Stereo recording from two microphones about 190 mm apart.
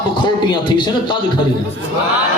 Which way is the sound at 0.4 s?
25° left (ahead or behind).